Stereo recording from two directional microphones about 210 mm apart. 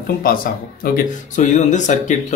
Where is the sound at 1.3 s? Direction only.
35° left (ahead or behind).